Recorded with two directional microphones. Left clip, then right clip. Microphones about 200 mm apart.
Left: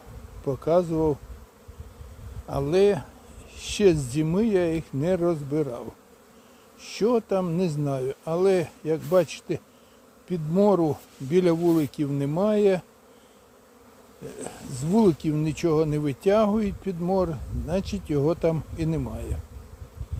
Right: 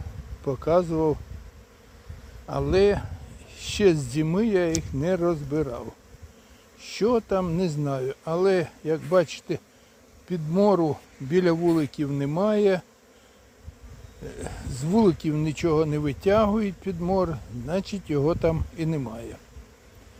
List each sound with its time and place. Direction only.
0.4 s speech: centre (ahead or behind)
2.5 s speech: centre (ahead or behind)
14.3 s speech: centre (ahead or behind)